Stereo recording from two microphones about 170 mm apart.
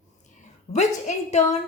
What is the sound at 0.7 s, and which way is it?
Speech, 40° left (ahead or behind).